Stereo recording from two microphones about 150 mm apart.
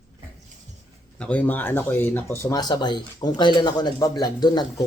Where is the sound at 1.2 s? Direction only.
10° left (ahead or behind).